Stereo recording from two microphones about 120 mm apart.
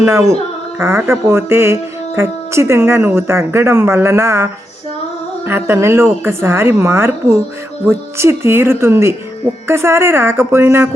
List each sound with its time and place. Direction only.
0.0 s speech: 25° right (ahead or behind)
5.5 s speech: 20° right (ahead or behind)